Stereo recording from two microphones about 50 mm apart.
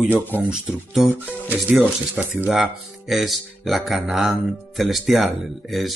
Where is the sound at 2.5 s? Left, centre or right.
Centre.